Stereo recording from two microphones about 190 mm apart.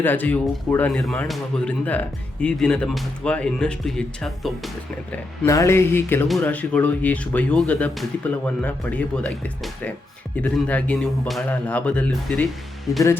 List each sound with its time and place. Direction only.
0.0 s speech: 10° left (ahead or behind)
5.1 s speech: 10° left (ahead or behind)